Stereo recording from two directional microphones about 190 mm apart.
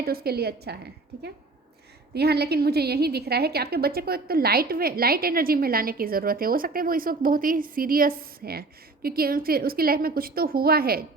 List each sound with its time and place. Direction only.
0.0 s a woman's voice: 50° right (ahead or behind)
2.1 s a woman's voice: 55° right (ahead or behind)